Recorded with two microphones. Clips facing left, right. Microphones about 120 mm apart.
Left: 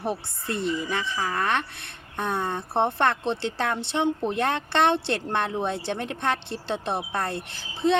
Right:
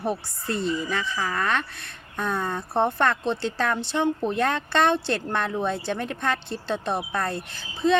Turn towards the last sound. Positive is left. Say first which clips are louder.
# even
turn(degrees=25)  # may be behind; listen again after turning